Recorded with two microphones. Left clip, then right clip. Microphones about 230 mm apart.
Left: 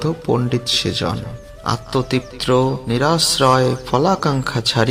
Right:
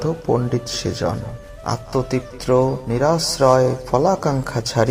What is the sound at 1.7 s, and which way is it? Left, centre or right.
Speech, left.